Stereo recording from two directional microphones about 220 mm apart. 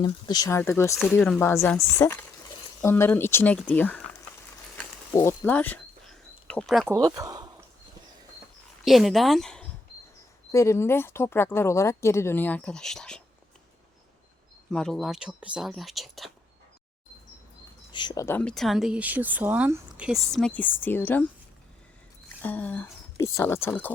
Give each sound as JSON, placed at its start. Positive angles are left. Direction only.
{"t": 0.0, "sound": "speech", "side_deg": 15}
{"t": 4.8, "sound": "a sound", "side_deg": 10}
{"t": 6.8, "sound": "speech", "side_deg": -15}
{"t": 8.8, "sound": "speech", "side_deg": 0}
{"t": 10.5, "sound": "speech", "side_deg": 15}
{"t": 14.7, "sound": "speech", "side_deg": 0}
{"t": 17.9, "sound": "speech", "side_deg": 20}
{"t": 22.4, "sound": "speech", "side_deg": 5}